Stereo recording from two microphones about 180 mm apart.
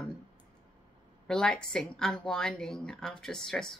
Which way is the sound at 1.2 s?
5° left (ahead or behind).